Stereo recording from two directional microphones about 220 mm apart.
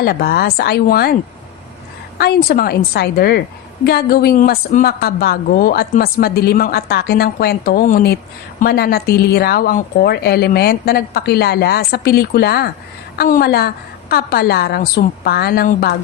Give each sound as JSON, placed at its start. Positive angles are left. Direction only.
{"t": 0.0, "sound": "a woman's voice", "side_deg": 45}
{"t": 2.1, "sound": "a woman's voice", "side_deg": 45}